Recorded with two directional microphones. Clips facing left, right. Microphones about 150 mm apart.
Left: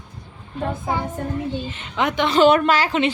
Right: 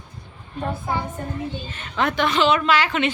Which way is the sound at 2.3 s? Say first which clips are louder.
Left 6 dB; 50° left (ahead or behind).